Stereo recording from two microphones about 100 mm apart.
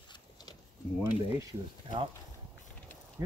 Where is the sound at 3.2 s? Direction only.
35° right (ahead or behind).